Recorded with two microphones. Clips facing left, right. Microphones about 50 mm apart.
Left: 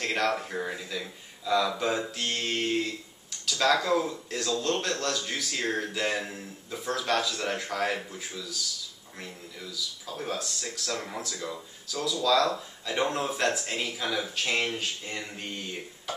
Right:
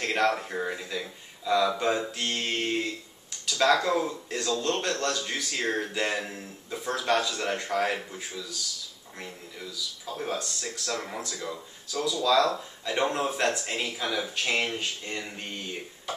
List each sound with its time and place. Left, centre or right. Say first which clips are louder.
0.0 s speech: right 2 dB; centre